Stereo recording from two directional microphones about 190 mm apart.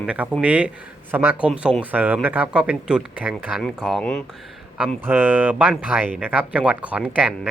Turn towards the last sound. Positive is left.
turn(degrees=-10)  # may be behind; listen again after turning